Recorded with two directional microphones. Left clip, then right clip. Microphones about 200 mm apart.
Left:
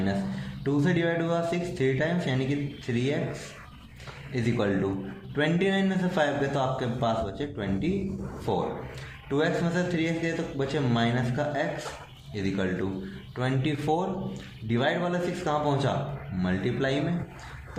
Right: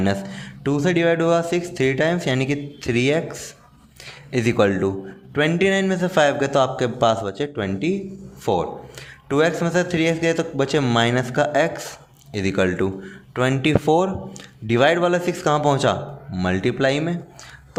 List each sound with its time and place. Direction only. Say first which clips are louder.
0.6 s speech: right 7 dB; 45° right (ahead or behind)
4.3 s speech: right 10 dB; 45° right (ahead or behind)